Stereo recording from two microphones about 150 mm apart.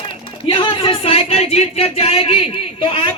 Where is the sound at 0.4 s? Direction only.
35° left (ahead or behind).